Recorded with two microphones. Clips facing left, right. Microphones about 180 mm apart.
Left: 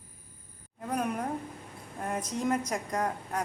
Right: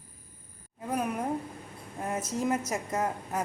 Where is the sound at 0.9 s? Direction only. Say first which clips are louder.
Right 1 dB; 5° right (ahead or behind).